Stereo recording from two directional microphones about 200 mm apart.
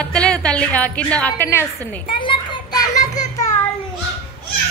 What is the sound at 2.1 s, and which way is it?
Children playing, 25° left (ahead or behind).